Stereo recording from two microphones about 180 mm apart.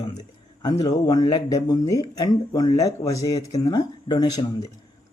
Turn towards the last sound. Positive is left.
turn(degrees=20)  # may be behind; listen again after turning